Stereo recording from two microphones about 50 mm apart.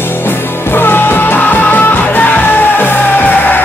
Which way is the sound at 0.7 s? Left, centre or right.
Left.